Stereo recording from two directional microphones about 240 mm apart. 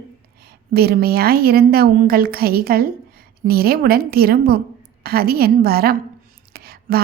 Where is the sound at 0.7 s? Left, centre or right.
Right.